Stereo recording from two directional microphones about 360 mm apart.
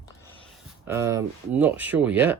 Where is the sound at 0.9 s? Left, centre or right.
Centre.